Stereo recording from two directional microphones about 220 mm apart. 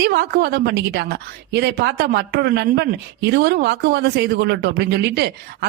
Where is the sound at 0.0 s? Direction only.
45° right (ahead or behind).